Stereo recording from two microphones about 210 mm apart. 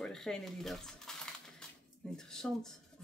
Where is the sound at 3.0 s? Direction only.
5° left (ahead or behind).